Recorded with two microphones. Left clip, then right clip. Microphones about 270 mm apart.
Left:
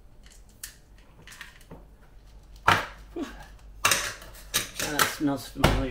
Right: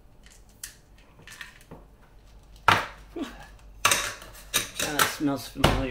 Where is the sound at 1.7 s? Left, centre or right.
Centre.